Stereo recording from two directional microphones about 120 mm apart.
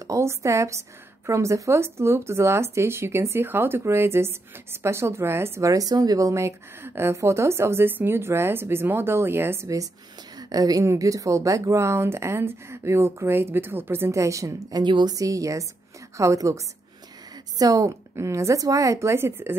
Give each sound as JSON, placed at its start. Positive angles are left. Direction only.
{"t": 0.0, "sound": "speech", "side_deg": -25}
{"t": 15.1, "sound": "speech", "side_deg": -30}